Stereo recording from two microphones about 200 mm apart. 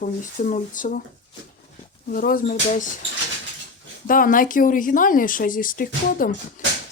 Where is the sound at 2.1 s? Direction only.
45° left (ahead or behind).